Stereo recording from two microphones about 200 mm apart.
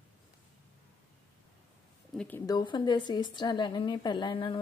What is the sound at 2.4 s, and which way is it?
Speech, 20° left (ahead or behind).